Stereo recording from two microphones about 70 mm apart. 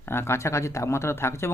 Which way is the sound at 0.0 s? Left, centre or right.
Left.